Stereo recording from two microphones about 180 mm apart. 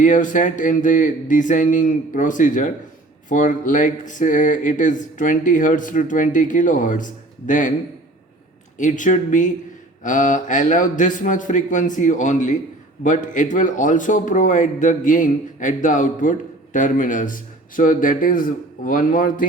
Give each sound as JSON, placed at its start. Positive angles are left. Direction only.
{"t": 0.0, "sound": "speech", "side_deg": 45}
{"t": 8.8, "sound": "speech", "side_deg": 45}